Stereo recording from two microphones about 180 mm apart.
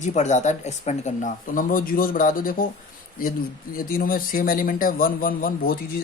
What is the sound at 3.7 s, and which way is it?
Speech, 50° left (ahead or behind).